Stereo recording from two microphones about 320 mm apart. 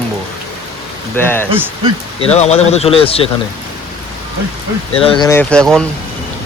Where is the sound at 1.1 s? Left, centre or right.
Centre.